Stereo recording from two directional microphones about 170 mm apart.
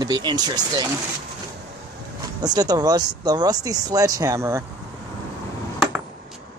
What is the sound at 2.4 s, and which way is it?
Speech, 25° right (ahead or behind).